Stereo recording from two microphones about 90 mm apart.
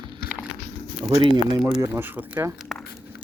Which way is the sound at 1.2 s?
55° right (ahead or behind).